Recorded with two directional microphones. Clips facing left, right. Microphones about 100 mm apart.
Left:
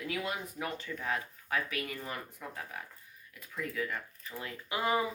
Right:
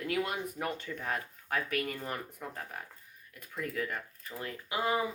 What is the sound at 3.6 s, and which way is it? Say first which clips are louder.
Speech: right 1 dB; 50° right (ahead or behind).